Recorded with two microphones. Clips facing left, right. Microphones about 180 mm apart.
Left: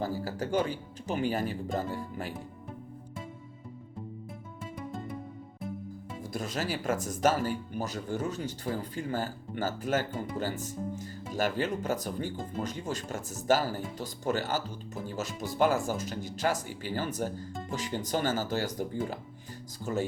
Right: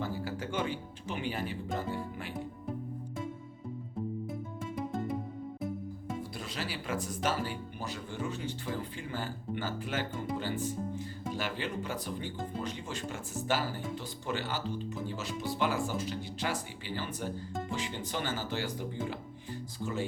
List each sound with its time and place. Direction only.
0.0 s speech: 40° left (ahead or behind)
6.3 s speech: 45° left (ahead or behind)